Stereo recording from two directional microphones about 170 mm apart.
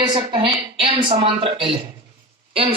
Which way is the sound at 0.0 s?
25° right (ahead or behind).